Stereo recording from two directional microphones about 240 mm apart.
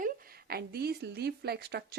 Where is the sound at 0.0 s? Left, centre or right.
Right.